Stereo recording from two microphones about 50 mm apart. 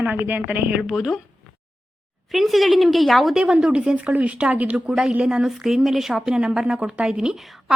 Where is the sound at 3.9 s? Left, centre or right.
Right.